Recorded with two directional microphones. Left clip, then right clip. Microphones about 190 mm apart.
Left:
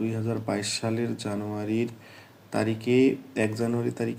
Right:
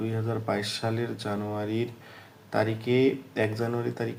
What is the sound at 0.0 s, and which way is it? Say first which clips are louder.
Speech: left 1 dB; 25° left (ahead or behind).